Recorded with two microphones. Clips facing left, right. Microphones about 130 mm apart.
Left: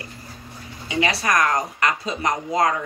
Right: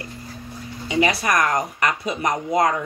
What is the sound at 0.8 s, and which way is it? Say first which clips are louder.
Speech: right 2 dB; 25° right (ahead or behind).